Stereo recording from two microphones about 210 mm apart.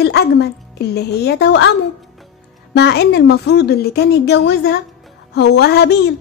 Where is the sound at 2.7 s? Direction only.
50° left (ahead or behind).